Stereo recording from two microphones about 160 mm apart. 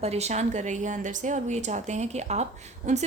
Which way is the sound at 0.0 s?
40° right (ahead or behind).